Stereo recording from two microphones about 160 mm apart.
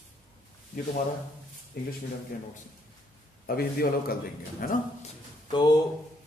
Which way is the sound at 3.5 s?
65° left (ahead or behind).